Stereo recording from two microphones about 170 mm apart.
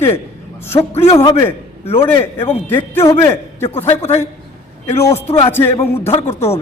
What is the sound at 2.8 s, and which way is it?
A man's voice, 15° left (ahead or behind).